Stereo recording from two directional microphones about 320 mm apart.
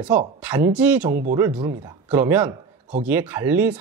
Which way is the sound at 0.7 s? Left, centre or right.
Centre.